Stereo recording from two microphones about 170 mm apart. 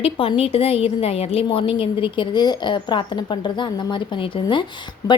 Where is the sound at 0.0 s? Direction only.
35° left (ahead or behind).